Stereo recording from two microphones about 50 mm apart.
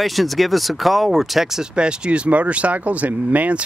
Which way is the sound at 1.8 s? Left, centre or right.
Centre.